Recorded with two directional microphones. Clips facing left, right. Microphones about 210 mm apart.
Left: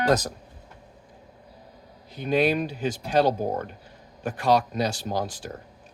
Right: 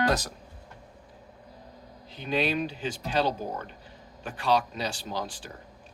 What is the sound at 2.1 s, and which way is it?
Speech, 45° left (ahead or behind).